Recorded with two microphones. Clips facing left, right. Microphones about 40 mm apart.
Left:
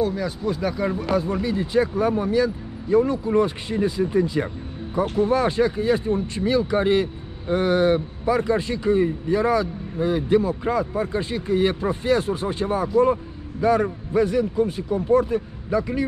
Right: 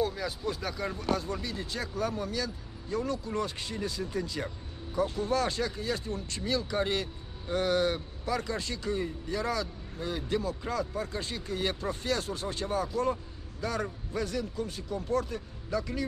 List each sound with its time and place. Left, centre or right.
0.0 s speech: centre; by 16.1 s left